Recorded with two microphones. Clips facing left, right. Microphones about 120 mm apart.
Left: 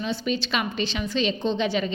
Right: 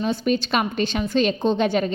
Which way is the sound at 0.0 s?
45° right (ahead or behind).